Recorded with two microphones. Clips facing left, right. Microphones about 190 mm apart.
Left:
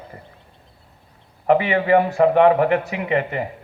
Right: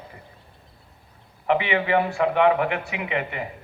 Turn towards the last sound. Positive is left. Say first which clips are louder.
# left 6 dB
turn(degrees=40)  # may be behind; listen again after turning